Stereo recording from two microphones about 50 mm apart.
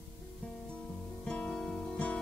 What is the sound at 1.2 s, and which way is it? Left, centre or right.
Music, centre.